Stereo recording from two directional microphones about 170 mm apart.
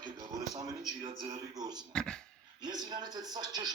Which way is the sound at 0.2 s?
20° right (ahead or behind).